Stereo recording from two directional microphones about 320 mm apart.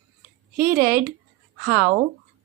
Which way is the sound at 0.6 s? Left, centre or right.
Right.